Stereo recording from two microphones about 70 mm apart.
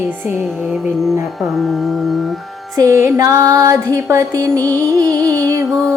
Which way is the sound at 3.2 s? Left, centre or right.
Right.